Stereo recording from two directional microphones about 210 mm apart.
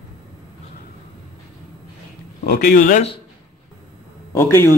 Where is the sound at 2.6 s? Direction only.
40° left (ahead or behind).